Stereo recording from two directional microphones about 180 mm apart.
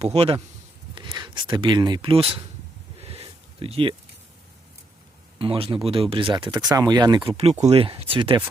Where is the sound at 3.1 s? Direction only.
35° right (ahead or behind).